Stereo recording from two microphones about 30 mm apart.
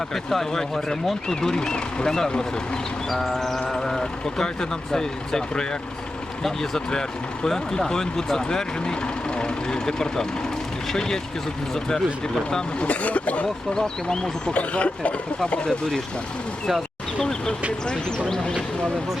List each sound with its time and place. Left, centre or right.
0.1 s speech: centre
1.4 s speech: left
3.1 s speech: centre
8.8 s speech: left
12.8 s speech: left
13.7 s speech: left
14.5 s speech: left
17.2 s speech: left